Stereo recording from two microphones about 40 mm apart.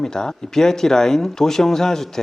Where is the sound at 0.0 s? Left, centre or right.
Centre.